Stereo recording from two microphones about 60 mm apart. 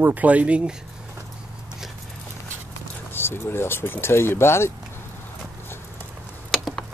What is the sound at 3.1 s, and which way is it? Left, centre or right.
Speech, left.